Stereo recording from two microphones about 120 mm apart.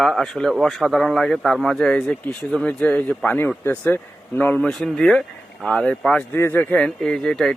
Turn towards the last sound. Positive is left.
turn(degrees=5)  # may be behind; listen again after turning